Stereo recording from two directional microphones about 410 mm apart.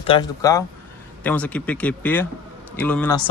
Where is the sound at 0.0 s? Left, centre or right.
Centre.